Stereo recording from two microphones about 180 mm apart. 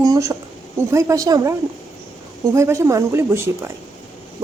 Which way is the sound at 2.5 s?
15° right (ahead or behind).